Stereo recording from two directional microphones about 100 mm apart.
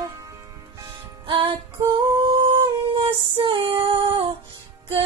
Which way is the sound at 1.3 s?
65° right (ahead or behind).